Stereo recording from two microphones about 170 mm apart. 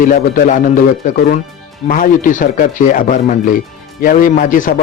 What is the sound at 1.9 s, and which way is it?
Speech, 50° left (ahead or behind).